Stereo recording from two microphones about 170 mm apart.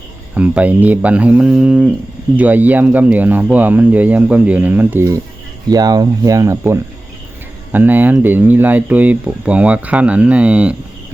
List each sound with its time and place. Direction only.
0.3 s speech: 10° right (ahead or behind)